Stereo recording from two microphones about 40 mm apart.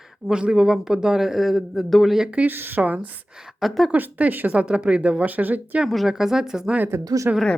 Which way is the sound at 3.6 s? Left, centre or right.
Centre.